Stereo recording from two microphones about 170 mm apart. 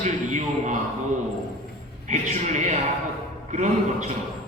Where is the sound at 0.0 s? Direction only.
45° right (ahead or behind).